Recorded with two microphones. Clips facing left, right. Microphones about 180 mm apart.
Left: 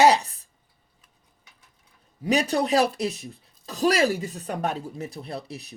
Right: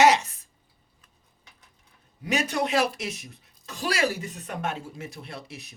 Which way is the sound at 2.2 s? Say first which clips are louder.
Left 4 dB; 35° left (ahead or behind).